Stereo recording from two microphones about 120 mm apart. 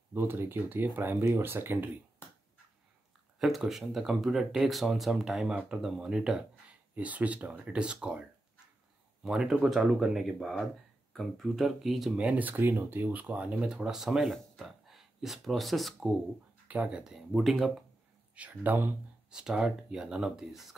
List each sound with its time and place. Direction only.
0.1 s speech: 20° right (ahead or behind)
3.3 s speech: 5° right (ahead or behind)
16.6 s speech: 10° right (ahead or behind)